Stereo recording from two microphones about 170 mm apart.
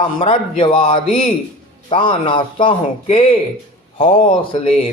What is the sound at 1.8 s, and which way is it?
A man's voice, 30° left (ahead or behind).